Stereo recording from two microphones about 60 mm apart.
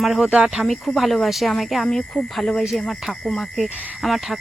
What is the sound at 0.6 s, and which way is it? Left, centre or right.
Speech, centre.